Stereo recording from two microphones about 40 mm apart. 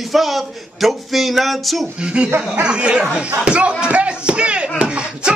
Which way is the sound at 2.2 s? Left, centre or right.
Right.